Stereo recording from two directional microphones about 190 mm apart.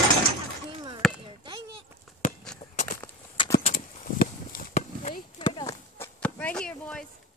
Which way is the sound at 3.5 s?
40° left (ahead or behind).